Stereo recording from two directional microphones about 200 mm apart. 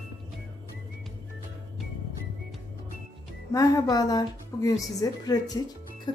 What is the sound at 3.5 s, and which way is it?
Speech, 20° left (ahead or behind).